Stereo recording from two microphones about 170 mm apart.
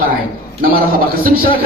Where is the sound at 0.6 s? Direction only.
60° right (ahead or behind).